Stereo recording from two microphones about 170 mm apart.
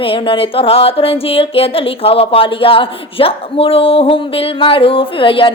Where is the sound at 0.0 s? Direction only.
30° left (ahead or behind).